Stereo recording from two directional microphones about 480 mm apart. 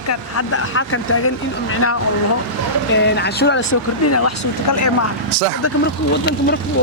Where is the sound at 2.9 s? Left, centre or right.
Left.